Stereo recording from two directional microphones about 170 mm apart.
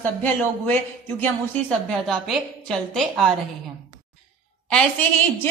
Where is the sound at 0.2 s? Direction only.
10° left (ahead or behind).